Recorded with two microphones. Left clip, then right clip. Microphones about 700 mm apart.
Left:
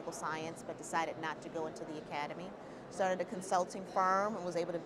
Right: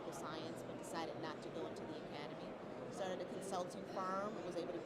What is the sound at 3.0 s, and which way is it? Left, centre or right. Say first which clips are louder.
Speech: left 11 dB; left.